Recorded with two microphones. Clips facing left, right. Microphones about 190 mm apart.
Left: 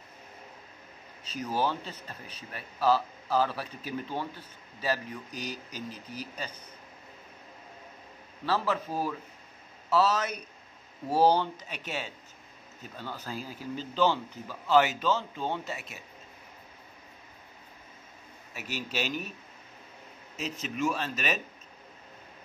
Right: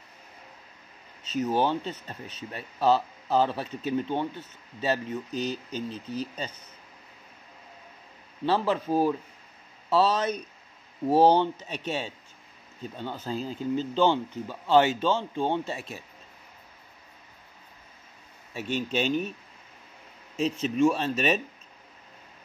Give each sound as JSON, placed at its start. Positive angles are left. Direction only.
{"t": 1.4, "sound": "speech", "side_deg": -25}
{"t": 8.5, "sound": "speech", "side_deg": -30}
{"t": 18.7, "sound": "a man's voice", "side_deg": 5}
{"t": 20.4, "sound": "speech", "side_deg": -30}